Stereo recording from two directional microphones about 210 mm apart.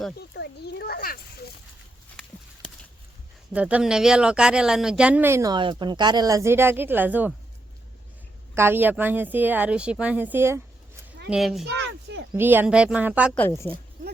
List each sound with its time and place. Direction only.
0.2 s a sound: 50° left (ahead or behind)
3.5 s speech: 5° right (ahead or behind)
8.5 s speech: 10° right (ahead or behind)
11.7 s a sound: 55° right (ahead or behind)
12.3 s speech: 10° right (ahead or behind)
13.3 s speech: 5° left (ahead or behind)